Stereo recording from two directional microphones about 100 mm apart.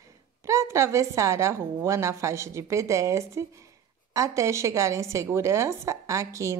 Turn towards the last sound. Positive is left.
turn(degrees=-30)  # may be behind; listen again after turning